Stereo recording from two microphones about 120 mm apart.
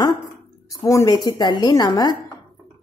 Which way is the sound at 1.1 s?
35° left (ahead or behind).